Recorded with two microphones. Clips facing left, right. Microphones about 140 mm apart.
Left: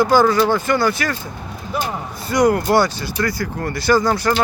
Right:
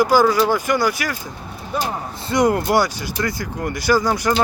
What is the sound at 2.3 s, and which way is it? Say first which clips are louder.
Speech: left 1 dB; 25° right (ahead or behind).